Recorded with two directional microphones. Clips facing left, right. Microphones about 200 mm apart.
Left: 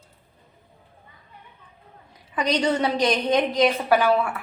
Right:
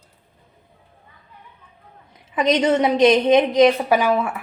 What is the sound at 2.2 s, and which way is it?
A woman's voice, 25° right (ahead or behind).